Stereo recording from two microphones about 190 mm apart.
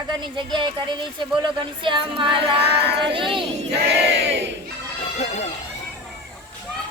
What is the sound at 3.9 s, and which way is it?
Battle cry, 65° right (ahead or behind).